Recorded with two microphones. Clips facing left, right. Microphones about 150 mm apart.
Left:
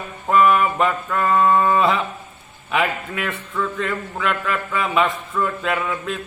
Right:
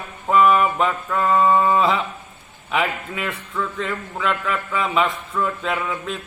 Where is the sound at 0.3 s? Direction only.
Centre (ahead or behind).